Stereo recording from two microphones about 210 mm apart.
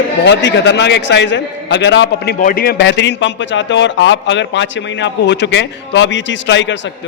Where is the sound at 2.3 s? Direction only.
40° left (ahead or behind).